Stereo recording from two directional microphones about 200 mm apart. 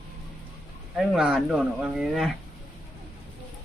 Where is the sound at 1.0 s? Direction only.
5° right (ahead or behind).